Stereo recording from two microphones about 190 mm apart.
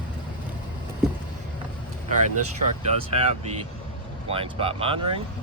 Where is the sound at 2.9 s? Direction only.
30° right (ahead or behind).